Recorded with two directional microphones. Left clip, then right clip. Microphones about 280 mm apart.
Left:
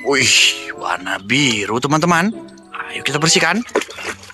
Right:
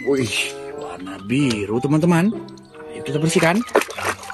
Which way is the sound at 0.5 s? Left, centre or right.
Centre.